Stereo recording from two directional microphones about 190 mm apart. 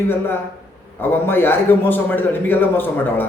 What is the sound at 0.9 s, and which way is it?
A man's voice, 10° left (ahead or behind).